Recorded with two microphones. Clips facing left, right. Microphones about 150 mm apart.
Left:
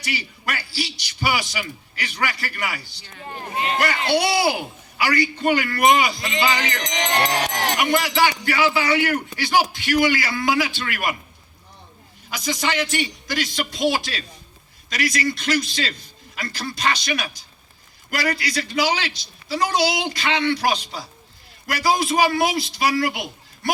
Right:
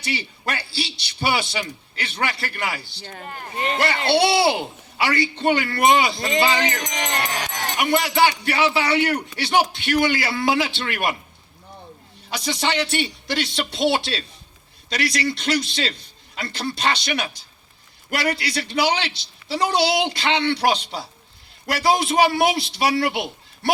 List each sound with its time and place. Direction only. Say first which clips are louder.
0.0 s a man's voice: right 2 dB; 30° right (ahead or behind)
2.9 s speech: right 5 dB; 60° right (ahead or behind)
4.1 s a man's voice: right 3 dB; 25° right (ahead or behind)
7.0 s a sound: left 6 dB; 75° left (ahead or behind)
7.8 s a man's voice: right 2 dB; 25° right (ahead or behind)
12.3 s a man's voice: right 1 dB; 30° right (ahead or behind)